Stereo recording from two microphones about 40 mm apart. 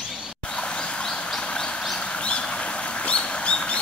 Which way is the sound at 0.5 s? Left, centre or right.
Left.